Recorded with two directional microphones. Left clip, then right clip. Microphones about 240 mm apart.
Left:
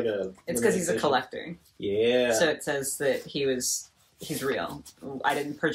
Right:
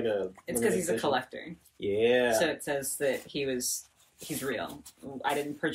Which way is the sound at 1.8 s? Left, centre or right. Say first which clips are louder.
Left 1 dB; right.